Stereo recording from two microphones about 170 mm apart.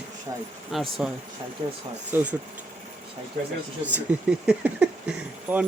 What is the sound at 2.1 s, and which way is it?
Speech, 10° right (ahead or behind).